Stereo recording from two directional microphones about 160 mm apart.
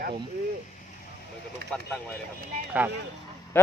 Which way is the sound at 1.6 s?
80° right.